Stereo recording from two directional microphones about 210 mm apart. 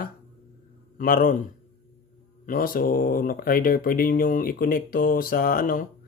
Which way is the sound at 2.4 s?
40° left (ahead or behind).